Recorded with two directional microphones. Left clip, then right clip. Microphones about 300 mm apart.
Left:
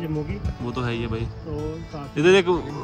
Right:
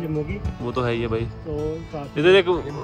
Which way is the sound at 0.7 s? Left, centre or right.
Centre.